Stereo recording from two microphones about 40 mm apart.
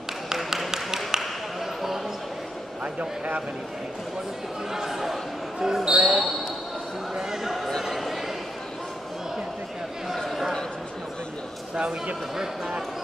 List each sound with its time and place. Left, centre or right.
0.3 s a sound: centre
2.8 s speech: right
4.7 s speech: centre
7.5 s speech: centre
10.1 s a man's voice: centre
11.7 s speech: right
12.4 s speech: centre